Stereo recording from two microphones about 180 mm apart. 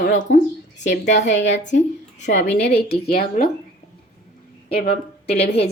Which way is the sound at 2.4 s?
70° left (ahead or behind).